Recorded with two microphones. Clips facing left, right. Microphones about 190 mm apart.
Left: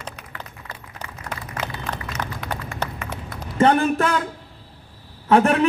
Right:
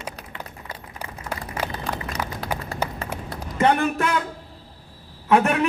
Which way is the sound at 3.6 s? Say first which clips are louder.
Left 3 dB; 35° left (ahead or behind).